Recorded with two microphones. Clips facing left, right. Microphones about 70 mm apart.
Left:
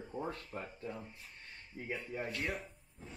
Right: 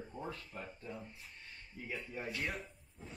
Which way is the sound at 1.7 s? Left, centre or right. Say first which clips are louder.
Left 3 dB; left.